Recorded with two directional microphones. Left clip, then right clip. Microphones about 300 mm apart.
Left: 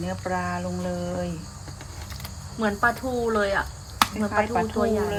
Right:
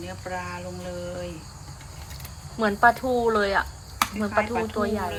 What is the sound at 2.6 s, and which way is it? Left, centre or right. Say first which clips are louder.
Speech: right 4 dB; centre.